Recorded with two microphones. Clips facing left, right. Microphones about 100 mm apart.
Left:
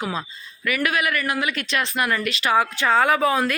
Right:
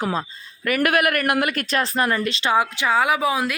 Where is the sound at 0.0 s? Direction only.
40° right (ahead or behind).